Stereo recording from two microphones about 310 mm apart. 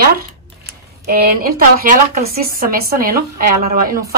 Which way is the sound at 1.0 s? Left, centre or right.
Right.